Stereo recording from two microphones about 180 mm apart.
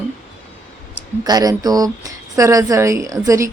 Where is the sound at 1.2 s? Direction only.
20° right (ahead or behind).